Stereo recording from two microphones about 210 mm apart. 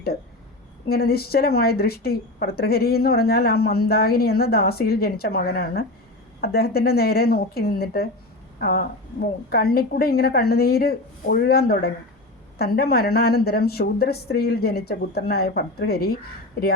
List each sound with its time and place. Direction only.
0.9 s a woman's voice: 45° left (ahead or behind)